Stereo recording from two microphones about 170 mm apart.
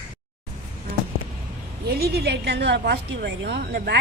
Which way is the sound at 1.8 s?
70° right (ahead or behind).